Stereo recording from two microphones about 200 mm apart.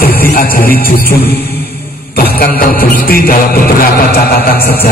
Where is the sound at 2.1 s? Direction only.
50° left (ahead or behind).